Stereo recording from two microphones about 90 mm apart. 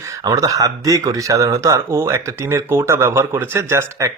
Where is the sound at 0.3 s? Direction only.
40° right (ahead or behind).